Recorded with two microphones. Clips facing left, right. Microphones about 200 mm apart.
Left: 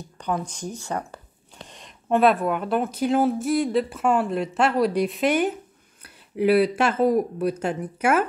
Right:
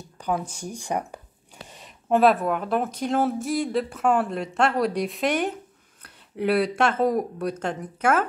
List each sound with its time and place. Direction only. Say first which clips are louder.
0.2 s speech: even; 5° right (ahead or behind)